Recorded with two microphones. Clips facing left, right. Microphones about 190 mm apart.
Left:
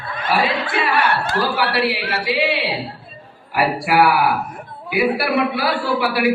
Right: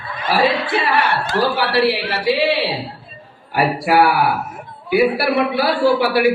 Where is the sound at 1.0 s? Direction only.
55° left (ahead or behind).